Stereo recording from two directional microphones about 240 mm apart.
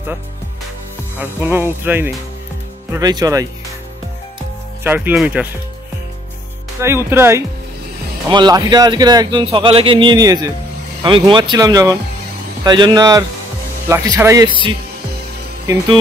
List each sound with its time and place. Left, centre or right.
1.2 s a man's voice: centre
4.8 s speech: centre
6.8 s a man's voice: centre